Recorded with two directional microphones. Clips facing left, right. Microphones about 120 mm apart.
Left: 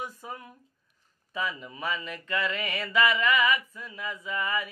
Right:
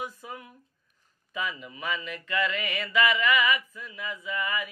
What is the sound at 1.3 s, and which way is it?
Mantra, 35° left (ahead or behind).